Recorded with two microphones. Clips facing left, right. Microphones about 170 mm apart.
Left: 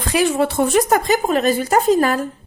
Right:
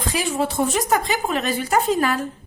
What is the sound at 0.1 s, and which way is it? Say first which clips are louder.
A woman's voice: left 7 dB; 65° left (ahead or behind).